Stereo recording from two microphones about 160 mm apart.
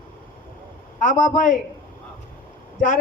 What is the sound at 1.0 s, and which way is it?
Speech, 55° left (ahead or behind).